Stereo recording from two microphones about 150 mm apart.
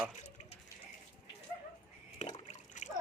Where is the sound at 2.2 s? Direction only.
50° left (ahead or behind).